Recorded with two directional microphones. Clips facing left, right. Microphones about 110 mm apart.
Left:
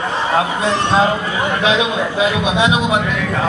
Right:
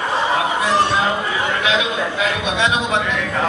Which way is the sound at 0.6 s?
25° left (ahead or behind).